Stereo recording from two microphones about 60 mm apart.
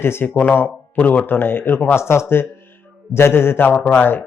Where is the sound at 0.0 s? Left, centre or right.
Left.